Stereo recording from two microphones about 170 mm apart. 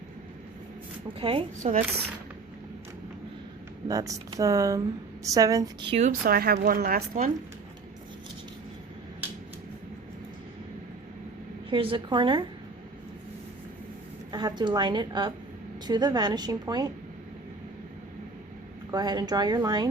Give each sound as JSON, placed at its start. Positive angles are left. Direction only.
{"t": 1.2, "sound": "speech", "side_deg": -35}
{"t": 3.8, "sound": "a woman's voice", "side_deg": -20}
{"t": 6.0, "sound": "a woman's voice", "side_deg": -55}
{"t": 11.7, "sound": "a woman's voice", "side_deg": -30}
{"t": 14.3, "sound": "a woman's voice", "side_deg": -25}
{"t": 18.9, "sound": "a woman's voice", "side_deg": -25}